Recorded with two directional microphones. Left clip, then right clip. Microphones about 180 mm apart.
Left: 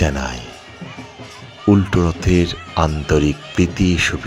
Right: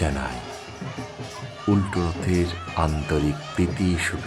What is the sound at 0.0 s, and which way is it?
Speech, 20° left (ahead or behind).